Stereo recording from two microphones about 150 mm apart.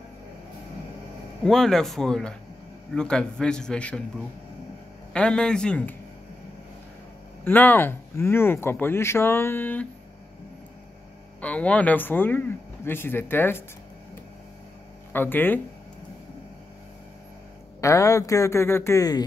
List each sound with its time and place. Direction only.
1.4 s a man's voice: 5° left (ahead or behind)
5.1 s speech: 5° left (ahead or behind)
7.4 s speech: 15° left (ahead or behind)
11.4 s speech: 10° left (ahead or behind)
15.1 s speech: 15° left (ahead or behind)
17.7 s speech: 20° left (ahead or behind)